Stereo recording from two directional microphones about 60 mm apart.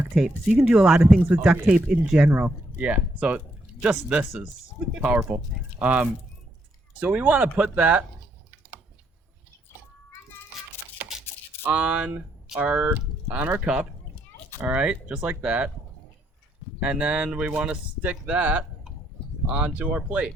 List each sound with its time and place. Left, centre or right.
0.1 s speech: centre
2.3 s speech: right
11.6 s speech: right
16.8 s speech: right